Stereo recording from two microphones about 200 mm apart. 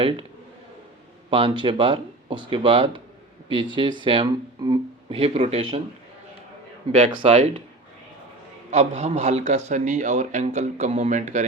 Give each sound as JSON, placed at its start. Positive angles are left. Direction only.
{"t": 1.3, "sound": "speech", "side_deg": -25}
{"t": 7.1, "sound": "a man's voice", "side_deg": -30}
{"t": 8.7, "sound": "a man's voice", "side_deg": -35}